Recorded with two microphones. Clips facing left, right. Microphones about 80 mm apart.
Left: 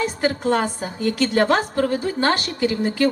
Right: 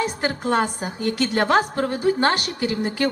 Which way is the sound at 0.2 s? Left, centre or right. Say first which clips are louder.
Left 3 dB; right.